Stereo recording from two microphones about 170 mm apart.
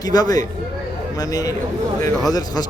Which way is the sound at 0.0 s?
25° left (ahead or behind).